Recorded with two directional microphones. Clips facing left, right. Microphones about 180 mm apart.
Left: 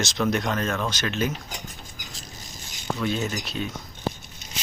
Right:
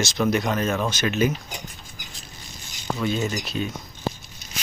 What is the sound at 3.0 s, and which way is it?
Speech, centre (ahead or behind).